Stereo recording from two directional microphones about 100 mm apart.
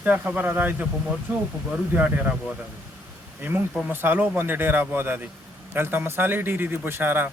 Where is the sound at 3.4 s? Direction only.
20° right (ahead or behind).